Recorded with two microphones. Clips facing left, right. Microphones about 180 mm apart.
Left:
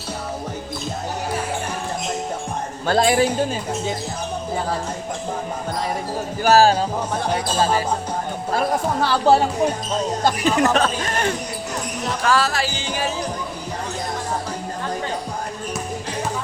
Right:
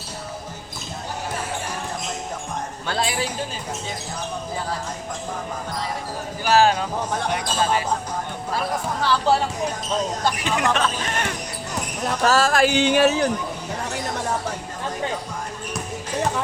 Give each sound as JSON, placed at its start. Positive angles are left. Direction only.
{"t": 2.8, "sound": "speech", "side_deg": 45}
{"t": 6.4, "sound": "speech", "side_deg": 40}
{"t": 8.5, "sound": "speech", "side_deg": 45}
{"t": 10.4, "sound": "speech", "side_deg": 40}
{"t": 12.2, "sound": "speech", "side_deg": -45}